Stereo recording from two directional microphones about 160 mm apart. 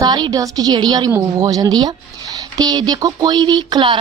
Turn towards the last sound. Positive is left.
turn(degrees=-30)  # may be behind; listen again after turning